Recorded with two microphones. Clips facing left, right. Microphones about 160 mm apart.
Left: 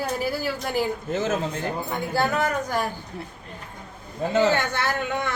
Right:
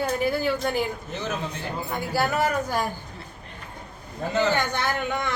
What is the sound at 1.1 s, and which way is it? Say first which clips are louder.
Speech: left 7 dB; 45° left (ahead or behind).